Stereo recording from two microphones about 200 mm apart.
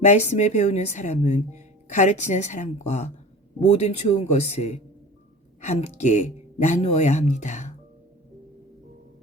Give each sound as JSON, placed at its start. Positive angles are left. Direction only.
{"t": 0.0, "sound": "speech", "side_deg": 35}